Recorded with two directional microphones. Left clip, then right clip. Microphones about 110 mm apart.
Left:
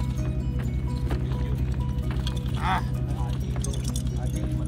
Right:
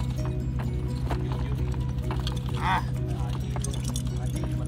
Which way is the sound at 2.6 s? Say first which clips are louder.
Right 1 dB; 20° right (ahead or behind).